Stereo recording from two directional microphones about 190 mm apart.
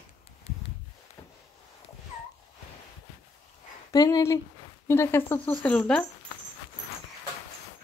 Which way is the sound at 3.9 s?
20° left (ahead or behind).